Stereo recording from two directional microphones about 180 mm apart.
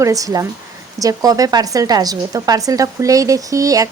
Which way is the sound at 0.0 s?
20° right (ahead or behind).